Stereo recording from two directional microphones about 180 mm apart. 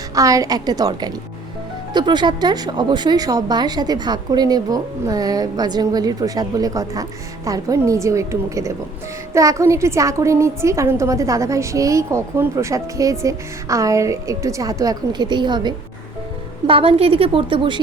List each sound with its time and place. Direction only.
0.1 s a woman's voice: 20° right (ahead or behind)